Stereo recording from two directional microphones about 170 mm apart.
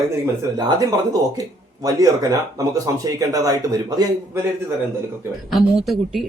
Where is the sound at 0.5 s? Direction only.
20° right (ahead or behind).